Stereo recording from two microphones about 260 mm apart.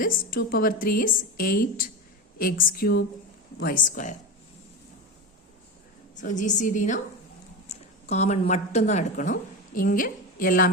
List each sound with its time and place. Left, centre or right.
0.0 s a woman's voice: left
6.1 s a woman's voice: left